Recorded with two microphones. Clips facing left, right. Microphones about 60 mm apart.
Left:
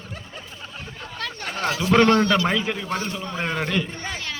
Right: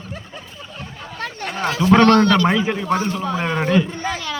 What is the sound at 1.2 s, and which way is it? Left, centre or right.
Chatter, right.